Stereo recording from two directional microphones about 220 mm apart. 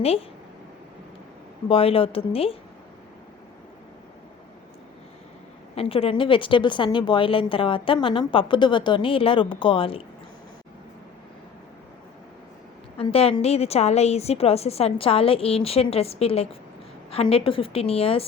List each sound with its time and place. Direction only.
0.0 s a woman's voice: 25° left (ahead or behind)
1.6 s a woman's voice: 25° left (ahead or behind)
5.7 s a woman's voice: 25° left (ahead or behind)
13.0 s a woman's voice: 25° left (ahead or behind)